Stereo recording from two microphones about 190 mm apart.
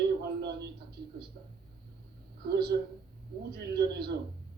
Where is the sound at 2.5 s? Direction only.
55° right (ahead or behind).